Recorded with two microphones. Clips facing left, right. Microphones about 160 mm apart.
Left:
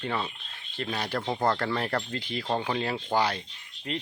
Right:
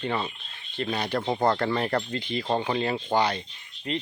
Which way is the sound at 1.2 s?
15° right (ahead or behind).